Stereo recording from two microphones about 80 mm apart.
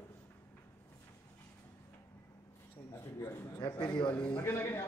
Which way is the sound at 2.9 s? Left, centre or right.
Left.